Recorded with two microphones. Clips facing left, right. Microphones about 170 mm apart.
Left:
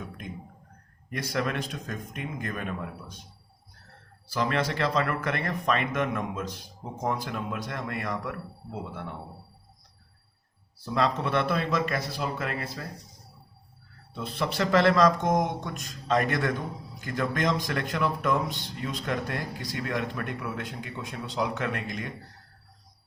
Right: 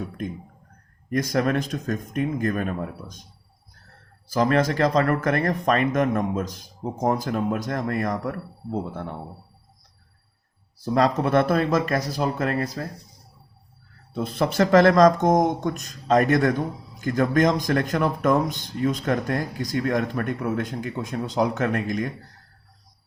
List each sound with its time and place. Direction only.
1.1 s speech: 45° right (ahead or behind)
4.4 s a man's voice: 45° right (ahead or behind)
10.9 s speech: 45° right (ahead or behind)
14.1 s speech: 45° right (ahead or behind)